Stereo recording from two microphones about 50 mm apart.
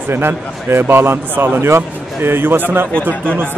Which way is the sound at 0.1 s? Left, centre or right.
Right.